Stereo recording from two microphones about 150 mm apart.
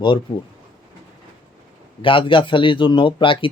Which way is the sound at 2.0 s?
35° left (ahead or behind).